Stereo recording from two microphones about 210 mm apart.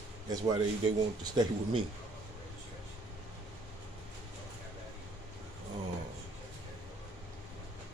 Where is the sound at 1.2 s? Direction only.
20° right (ahead or behind).